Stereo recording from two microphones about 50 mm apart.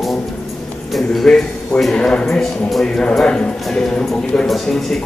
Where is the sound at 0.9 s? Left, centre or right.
Centre.